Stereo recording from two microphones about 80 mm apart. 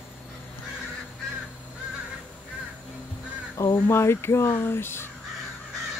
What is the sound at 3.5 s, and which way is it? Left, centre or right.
Speech, left.